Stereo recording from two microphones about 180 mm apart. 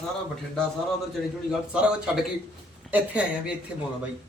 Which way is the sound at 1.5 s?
5° right (ahead or behind).